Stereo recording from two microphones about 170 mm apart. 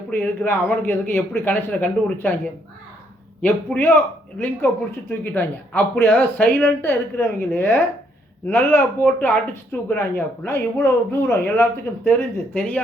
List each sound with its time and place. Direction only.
0.1 s speech: 15° left (ahead or behind)